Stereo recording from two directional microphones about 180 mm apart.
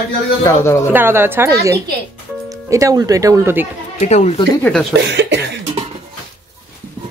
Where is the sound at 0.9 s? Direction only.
10° right (ahead or behind).